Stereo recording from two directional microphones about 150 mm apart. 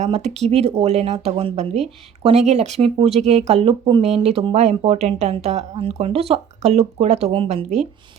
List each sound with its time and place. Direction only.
0.0 s speech: 45° right (ahead or behind)